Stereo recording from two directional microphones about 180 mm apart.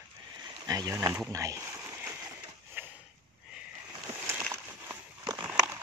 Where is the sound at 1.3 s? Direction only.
20° right (ahead or behind).